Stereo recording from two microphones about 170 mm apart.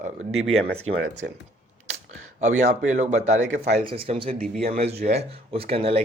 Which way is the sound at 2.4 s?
45° right (ahead or behind).